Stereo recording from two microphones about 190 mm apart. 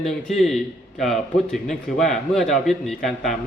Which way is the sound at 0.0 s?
Centre (ahead or behind).